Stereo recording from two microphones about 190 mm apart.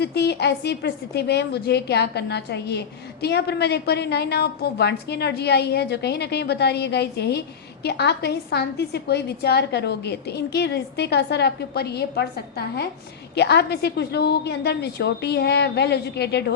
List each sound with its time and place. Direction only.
0.0 s a woman's voice: 60° left (ahead or behind)